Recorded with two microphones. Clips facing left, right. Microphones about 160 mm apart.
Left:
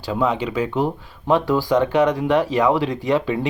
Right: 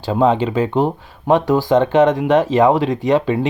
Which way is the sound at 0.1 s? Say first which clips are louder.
Right 6 dB; 30° right (ahead or behind).